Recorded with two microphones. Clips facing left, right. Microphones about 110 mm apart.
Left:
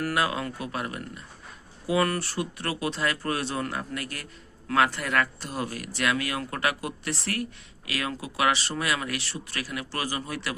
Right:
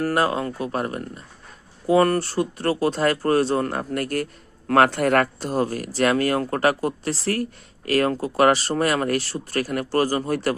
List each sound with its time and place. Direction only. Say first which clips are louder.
0.0 s speech: right 6 dB; 40° right (ahead or behind)